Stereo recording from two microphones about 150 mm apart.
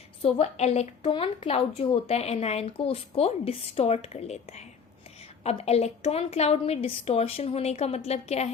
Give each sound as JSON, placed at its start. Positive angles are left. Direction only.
{"t": 0.2, "sound": "speech", "side_deg": 40}